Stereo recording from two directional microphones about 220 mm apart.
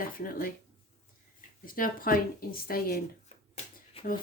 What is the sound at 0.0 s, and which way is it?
Speech, 40° left (ahead or behind).